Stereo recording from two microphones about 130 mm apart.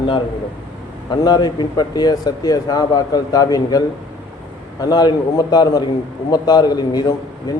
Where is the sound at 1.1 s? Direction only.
30° left (ahead or behind).